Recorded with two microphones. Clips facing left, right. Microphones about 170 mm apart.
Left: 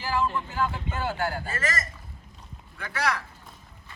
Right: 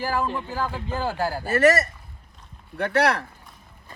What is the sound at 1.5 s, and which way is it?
Speech, 70° right (ahead or behind).